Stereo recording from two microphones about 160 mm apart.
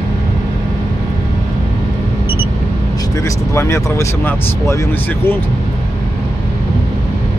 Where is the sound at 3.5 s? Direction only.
20° left (ahead or behind).